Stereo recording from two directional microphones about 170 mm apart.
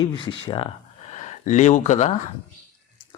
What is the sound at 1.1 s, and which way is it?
Speech, 45° left (ahead or behind).